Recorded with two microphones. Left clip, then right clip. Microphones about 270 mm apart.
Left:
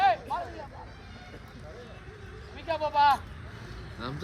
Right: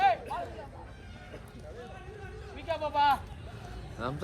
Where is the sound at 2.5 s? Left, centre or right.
Left.